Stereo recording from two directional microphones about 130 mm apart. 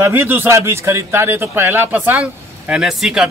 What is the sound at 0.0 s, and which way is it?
A man's voice, 20° right (ahead or behind).